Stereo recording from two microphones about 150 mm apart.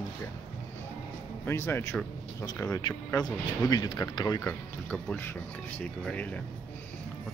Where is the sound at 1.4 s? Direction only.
15° left (ahead or behind).